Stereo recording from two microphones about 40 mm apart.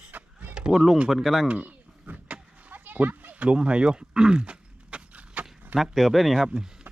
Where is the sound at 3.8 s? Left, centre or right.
Centre.